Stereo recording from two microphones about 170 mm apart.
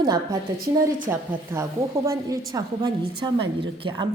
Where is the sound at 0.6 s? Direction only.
50° right (ahead or behind).